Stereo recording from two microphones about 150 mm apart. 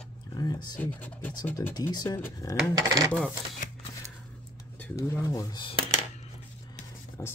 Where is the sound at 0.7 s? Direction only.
10° left (ahead or behind).